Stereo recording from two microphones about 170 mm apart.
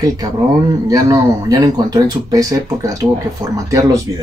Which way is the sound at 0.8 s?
20° right (ahead or behind).